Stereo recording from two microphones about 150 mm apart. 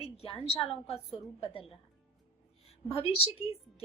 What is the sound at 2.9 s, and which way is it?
Speech, 40° left (ahead or behind).